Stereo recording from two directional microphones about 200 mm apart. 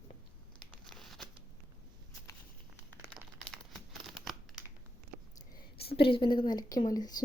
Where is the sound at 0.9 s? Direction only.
Centre (ahead or behind).